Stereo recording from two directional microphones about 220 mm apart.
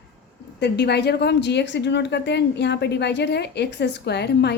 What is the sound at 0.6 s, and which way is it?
Speech, 50° left (ahead or behind).